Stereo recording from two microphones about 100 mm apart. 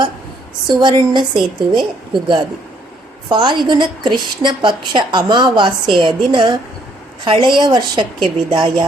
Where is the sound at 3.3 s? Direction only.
50° right (ahead or behind).